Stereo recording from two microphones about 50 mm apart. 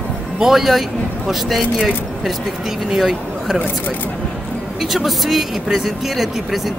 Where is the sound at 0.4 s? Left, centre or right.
Centre.